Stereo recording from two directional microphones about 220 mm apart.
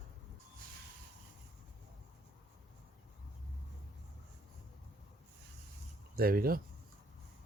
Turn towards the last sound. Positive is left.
turn(degrees=-40)  # may be behind; listen again after turning